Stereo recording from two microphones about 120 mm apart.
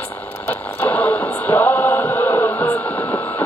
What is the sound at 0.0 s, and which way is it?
Radio, 15° left (ahead or behind).